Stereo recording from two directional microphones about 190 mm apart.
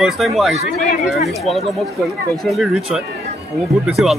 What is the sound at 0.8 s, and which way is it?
Speech, 35° left (ahead or behind).